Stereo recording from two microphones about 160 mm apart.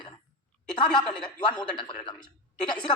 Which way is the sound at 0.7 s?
30° left (ahead or behind).